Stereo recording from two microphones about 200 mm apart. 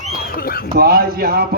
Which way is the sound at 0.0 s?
45° left (ahead or behind).